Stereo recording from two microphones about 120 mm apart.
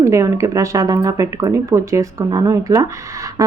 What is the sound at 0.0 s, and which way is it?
A woman's voice, 25° right (ahead or behind).